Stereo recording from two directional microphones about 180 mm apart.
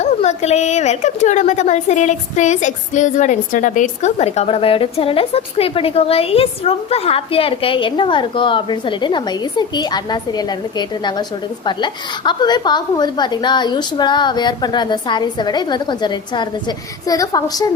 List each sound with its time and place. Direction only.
0.0 s a woman's voice: 40° left (ahead or behind); by 17.7 s 20° left (ahead or behind)